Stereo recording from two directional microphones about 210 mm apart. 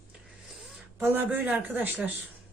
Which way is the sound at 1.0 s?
10° right (ahead or behind).